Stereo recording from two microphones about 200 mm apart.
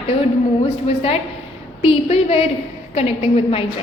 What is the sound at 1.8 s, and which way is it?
A woman's voice, 30° left (ahead or behind).